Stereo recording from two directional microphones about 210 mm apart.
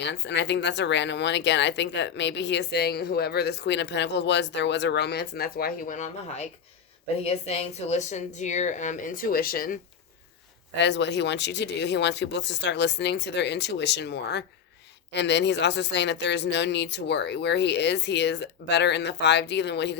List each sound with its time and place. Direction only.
0.0 s speech: 55° left (ahead or behind)
10.8 s speech: 55° left (ahead or behind)